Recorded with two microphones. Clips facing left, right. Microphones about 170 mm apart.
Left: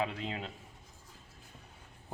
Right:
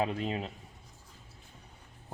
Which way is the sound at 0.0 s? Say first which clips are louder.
Right 4 dB; 40° right (ahead or behind).